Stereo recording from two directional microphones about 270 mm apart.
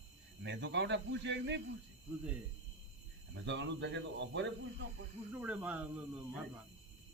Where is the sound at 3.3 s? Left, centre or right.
Right.